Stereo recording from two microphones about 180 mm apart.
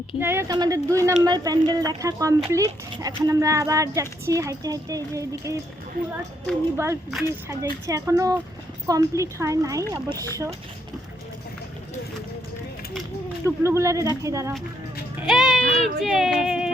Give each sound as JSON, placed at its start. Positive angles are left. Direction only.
{"t": 0.2, "sound": "speech", "side_deg": -15}
{"t": 6.7, "sound": "speech", "side_deg": -15}
{"t": 13.6, "sound": "speech", "side_deg": -15}
{"t": 15.2, "sound": "speech", "side_deg": 0}